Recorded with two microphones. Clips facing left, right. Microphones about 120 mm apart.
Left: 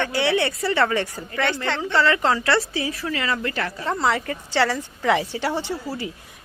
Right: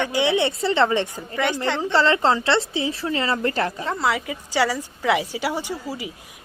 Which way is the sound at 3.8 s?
Centre (ahead or behind).